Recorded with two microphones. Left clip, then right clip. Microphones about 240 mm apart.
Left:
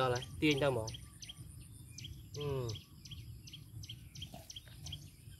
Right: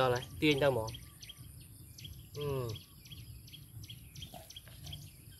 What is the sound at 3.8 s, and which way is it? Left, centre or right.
Bird, left.